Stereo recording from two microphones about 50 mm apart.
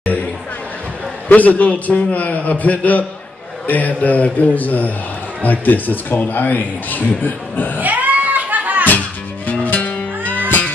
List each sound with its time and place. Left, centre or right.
1.3 s a man's voice: left
7.8 s a sound: right
9.5 s music: left